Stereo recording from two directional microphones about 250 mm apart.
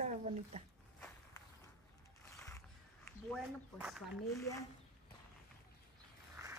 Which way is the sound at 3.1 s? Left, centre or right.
Centre.